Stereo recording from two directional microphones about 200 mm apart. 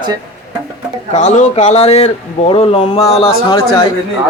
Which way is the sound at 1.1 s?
35° left (ahead or behind).